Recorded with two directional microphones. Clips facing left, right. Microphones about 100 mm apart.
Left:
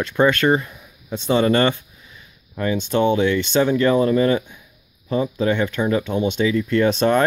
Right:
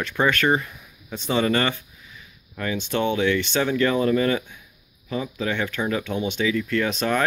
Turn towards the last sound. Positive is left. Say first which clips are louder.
# left 6 dB
turn(degrees=30)  # may be behind; listen again after turning